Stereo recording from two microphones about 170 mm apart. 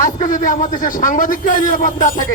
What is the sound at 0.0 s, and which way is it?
Speech, 50° left (ahead or behind).